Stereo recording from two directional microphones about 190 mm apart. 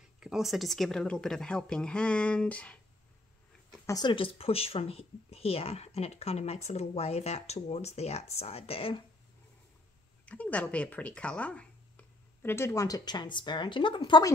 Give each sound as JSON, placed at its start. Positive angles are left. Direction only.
{"t": 0.2, "sound": "speech", "side_deg": -5}
{"t": 3.8, "sound": "speech", "side_deg": 20}
{"t": 10.2, "sound": "speech", "side_deg": 5}